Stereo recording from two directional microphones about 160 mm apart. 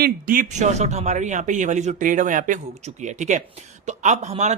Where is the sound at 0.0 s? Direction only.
60° right (ahead or behind).